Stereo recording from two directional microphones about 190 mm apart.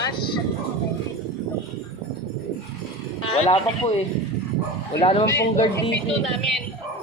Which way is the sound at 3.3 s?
30° left (ahead or behind).